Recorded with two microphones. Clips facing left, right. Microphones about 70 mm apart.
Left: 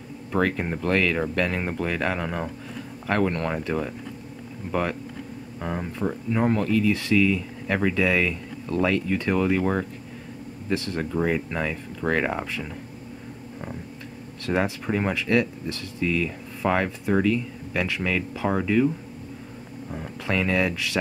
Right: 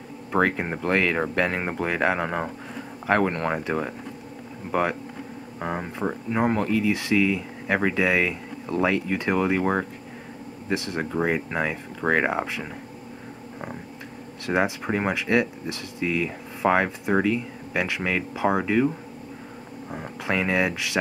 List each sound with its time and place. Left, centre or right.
0.3 s speech: centre
11.1 s speech: right
14.4 s speech: centre
19.9 s speech: centre